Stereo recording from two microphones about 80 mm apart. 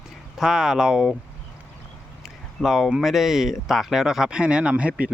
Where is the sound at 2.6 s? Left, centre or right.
Centre.